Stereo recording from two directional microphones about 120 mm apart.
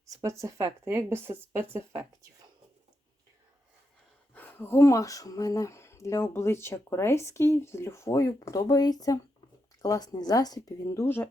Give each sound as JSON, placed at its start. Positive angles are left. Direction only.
{"t": 0.0, "sound": "speech", "side_deg": -25}
{"t": 4.4, "sound": "speech", "side_deg": 20}